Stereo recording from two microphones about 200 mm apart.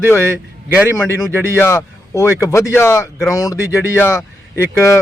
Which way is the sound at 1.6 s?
15° left (ahead or behind).